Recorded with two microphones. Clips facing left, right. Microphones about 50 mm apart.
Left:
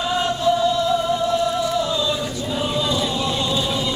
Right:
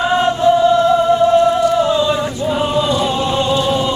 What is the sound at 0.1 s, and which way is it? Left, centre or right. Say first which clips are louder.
Music: right 6 dB; right.